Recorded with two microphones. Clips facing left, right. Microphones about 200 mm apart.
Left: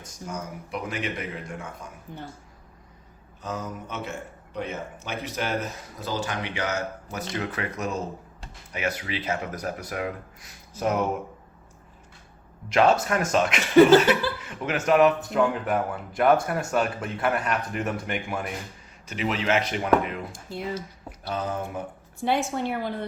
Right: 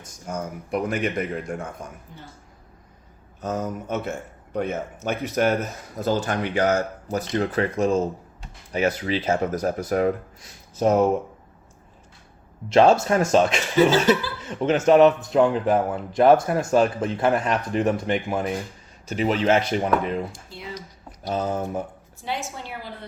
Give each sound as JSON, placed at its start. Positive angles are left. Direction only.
{"t": 0.3, "sound": "speech", "side_deg": -50}
{"t": 3.4, "sound": "speech", "side_deg": -45}
{"t": 12.6, "sound": "speech", "side_deg": -30}
{"t": 20.3, "sound": "speech", "side_deg": 50}
{"t": 21.2, "sound": "speech", "side_deg": -30}
{"t": 22.2, "sound": "a woman's voice", "side_deg": 60}